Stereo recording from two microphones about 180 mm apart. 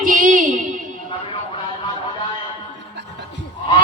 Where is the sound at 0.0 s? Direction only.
50° right (ahead or behind).